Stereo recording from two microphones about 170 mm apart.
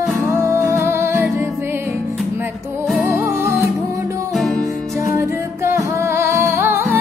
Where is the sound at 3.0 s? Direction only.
15° right (ahead or behind).